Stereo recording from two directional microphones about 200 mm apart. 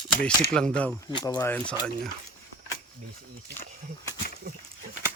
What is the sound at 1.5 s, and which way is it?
Speech, 5° left (ahead or behind).